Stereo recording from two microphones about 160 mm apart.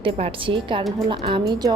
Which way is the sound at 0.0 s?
30° right (ahead or behind).